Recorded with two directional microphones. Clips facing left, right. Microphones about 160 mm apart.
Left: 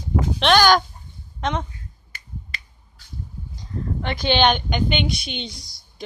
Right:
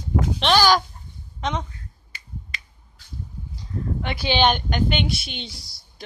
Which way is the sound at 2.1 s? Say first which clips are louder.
Left 1 dB; 50° left (ahead or behind).